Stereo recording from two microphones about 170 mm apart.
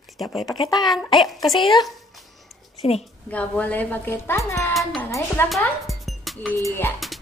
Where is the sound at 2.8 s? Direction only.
35° left (ahead or behind).